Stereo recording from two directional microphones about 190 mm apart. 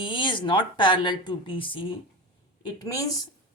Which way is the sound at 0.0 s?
25° left (ahead or behind).